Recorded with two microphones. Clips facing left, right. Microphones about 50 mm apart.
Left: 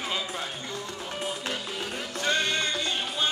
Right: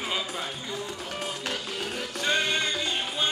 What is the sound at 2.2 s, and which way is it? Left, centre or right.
Music, right.